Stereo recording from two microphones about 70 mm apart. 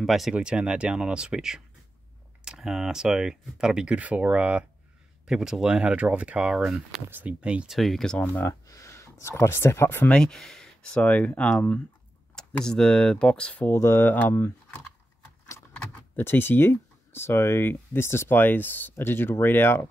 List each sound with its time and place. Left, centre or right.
0.0 s speech: centre
0.3 s speech: centre
7.1 s speech: right
7.7 s speech: centre
8.2 s speech: left
8.5 s speech: left
10.0 s speech: centre
12.6 s speech: centre
13.7 s speech: left
14.0 s speech: left
16.2 s speech: left